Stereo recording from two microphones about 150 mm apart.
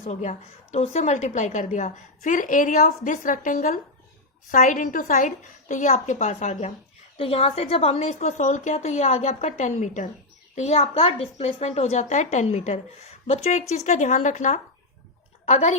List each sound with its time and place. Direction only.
0.0 s a woman's voice: 50° left (ahead or behind)
7.2 s a woman's voice: 40° left (ahead or behind)